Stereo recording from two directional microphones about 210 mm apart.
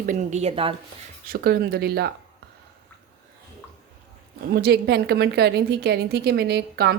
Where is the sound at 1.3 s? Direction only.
50° right (ahead or behind).